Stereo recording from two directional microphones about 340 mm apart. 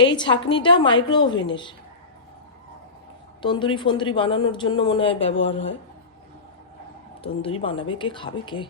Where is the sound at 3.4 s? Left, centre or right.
Centre.